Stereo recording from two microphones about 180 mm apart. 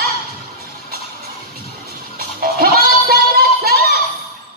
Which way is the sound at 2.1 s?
55° right (ahead or behind).